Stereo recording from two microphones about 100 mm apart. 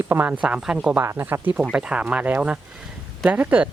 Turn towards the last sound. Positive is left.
turn(degrees=-15)  # may be behind; listen again after turning